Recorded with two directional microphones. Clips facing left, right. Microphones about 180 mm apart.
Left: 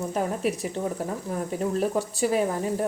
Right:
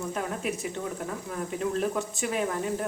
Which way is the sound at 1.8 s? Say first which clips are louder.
Left 4 dB; 35° left (ahead or behind).